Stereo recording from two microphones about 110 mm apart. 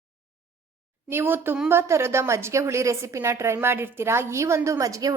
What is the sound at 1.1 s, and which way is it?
A woman's voice, 20° right (ahead or behind).